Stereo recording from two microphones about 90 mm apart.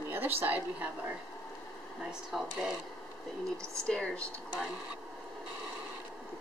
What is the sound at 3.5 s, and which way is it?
Speech, 35° right (ahead or behind).